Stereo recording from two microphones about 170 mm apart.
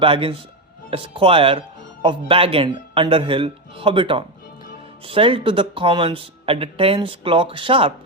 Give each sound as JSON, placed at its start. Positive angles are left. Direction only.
{"t": 0.0, "sound": "speech", "side_deg": -30}